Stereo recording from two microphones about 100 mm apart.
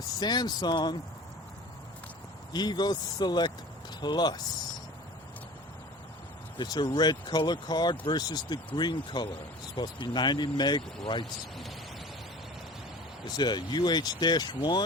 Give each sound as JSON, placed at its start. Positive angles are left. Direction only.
{"t": 0.2, "sound": "speech", "side_deg": 45}
{"t": 2.5, "sound": "speech", "side_deg": 45}
{"t": 6.6, "sound": "speech", "side_deg": 45}
{"t": 13.2, "sound": "speech", "side_deg": 45}